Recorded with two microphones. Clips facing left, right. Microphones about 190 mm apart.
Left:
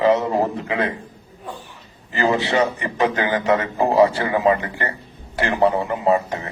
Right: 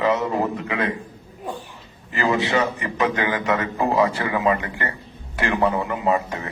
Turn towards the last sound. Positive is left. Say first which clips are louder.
# left 3 dB
turn(degrees=30)  # may be behind; listen again after turning